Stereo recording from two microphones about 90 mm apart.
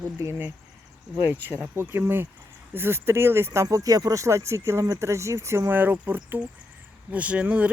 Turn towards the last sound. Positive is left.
turn(degrees=-15)  # may be behind; listen again after turning